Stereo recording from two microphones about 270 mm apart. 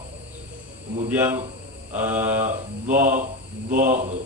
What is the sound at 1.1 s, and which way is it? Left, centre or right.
A man's voice, centre.